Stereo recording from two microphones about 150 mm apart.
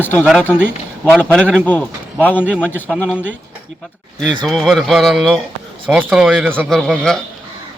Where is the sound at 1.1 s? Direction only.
5° left (ahead or behind).